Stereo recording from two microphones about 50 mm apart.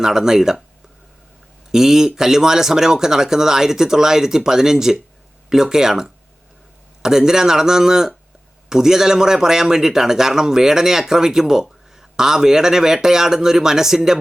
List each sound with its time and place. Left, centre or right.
0.0 s speech: centre
1.7 s speech: centre